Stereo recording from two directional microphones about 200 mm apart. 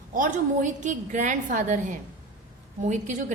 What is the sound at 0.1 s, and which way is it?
A woman's voice, 40° right (ahead or behind).